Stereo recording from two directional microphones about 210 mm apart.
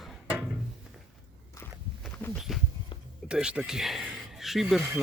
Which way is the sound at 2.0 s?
5° left (ahead or behind).